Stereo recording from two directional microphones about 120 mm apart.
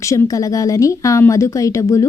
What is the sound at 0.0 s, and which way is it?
A woman's voice, 25° left (ahead or behind).